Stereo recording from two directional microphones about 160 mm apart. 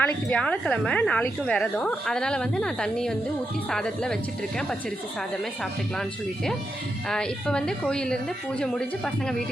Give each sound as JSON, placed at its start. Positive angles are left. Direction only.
{"t": 0.0, "sound": "a woman's voice", "side_deg": 5}
{"t": 6.0, "sound": "a woman's voice", "side_deg": 0}